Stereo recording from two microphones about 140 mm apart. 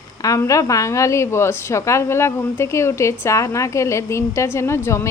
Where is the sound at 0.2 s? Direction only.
25° left (ahead or behind).